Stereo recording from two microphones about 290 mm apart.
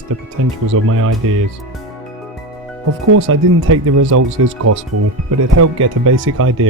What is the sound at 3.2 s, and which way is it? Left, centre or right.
Speech, right.